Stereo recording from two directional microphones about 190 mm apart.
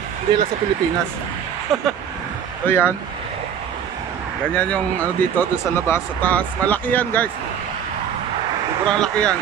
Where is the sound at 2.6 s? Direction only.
10° left (ahead or behind).